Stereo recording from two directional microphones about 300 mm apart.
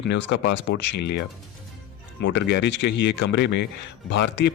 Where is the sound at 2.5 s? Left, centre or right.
Left.